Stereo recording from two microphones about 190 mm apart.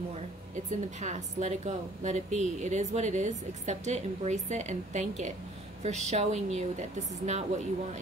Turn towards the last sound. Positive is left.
turn(degrees=-35)  # may be behind; listen again after turning